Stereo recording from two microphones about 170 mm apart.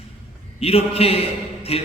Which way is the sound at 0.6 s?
35° left (ahead or behind).